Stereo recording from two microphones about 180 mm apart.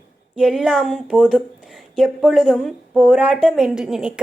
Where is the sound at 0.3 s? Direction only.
5° right (ahead or behind).